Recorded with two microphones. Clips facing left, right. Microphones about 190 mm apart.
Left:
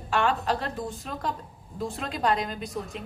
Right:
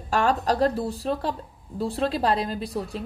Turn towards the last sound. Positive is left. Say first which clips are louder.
# right 4 dB
turn(degrees=-35)  # may be behind; listen again after turning